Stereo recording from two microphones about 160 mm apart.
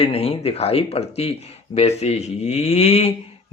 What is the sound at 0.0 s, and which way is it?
Speech, 35° left (ahead or behind).